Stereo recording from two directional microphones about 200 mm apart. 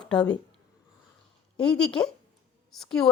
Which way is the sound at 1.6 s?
5° left (ahead or behind).